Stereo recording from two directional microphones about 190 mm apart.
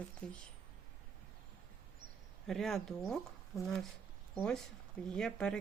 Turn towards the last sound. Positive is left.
turn(degrees=5)  # may be behind; listen again after turning